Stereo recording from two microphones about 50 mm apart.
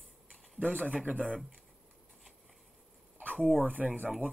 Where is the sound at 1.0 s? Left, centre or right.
Right.